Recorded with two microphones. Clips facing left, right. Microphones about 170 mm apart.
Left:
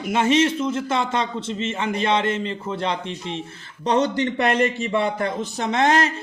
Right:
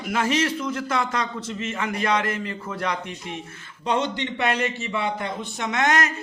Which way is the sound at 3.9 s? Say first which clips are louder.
Left 5 dB; 40° left (ahead or behind).